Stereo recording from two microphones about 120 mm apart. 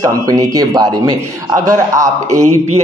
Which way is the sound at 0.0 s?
30° right (ahead or behind).